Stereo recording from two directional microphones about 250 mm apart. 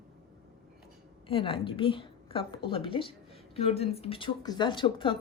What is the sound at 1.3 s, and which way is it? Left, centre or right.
Speech, left.